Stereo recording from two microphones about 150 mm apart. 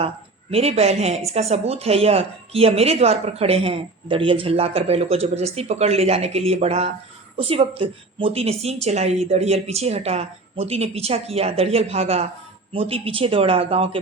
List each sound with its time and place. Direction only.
0.5 s a woman's voice: 45° right (ahead or behind)